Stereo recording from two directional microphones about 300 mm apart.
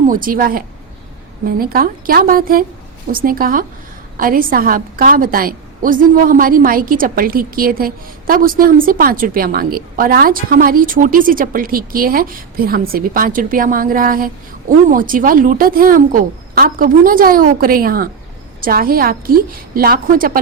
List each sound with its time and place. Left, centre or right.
0.1 s a woman's voice: right